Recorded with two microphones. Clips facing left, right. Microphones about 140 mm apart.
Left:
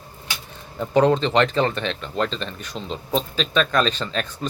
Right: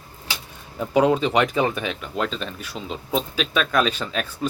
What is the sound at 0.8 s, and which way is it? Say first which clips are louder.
Speech: left 1 dB; 10° right (ahead or behind).